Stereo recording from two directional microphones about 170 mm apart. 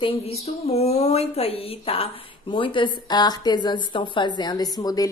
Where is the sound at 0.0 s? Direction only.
35° left (ahead or behind).